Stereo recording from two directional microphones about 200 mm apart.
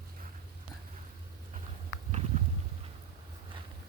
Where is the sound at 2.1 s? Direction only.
35° right (ahead or behind).